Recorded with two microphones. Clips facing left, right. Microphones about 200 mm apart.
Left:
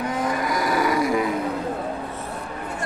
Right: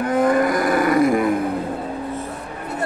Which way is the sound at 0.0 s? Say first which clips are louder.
Right 8 dB; 55° right (ahead or behind).